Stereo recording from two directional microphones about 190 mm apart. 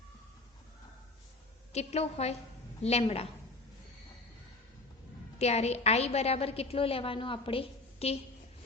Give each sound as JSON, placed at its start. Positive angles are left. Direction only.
{"t": 1.7, "sound": "a woman's voice", "side_deg": 35}
{"t": 5.4, "sound": "a woman's voice", "side_deg": 35}